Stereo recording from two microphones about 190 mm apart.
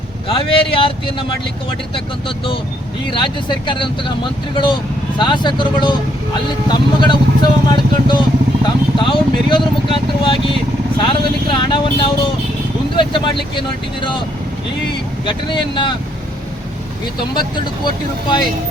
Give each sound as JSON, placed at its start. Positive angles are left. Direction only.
{"t": 0.3, "sound": "speech", "side_deg": 30}
{"t": 3.1, "sound": "speech", "side_deg": 25}
{"t": 15.3, "sound": "speech", "side_deg": 25}
{"t": 17.8, "sound": "speech", "side_deg": 20}